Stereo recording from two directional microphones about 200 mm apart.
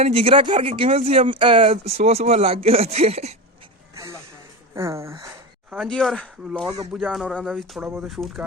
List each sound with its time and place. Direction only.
0.0 s speech: 30° right (ahead or behind)
4.7 s speech: 15° right (ahead or behind)
5.7 s speech: centre (ahead or behind)